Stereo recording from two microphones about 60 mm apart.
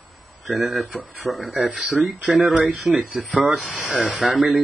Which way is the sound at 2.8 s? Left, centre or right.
Right.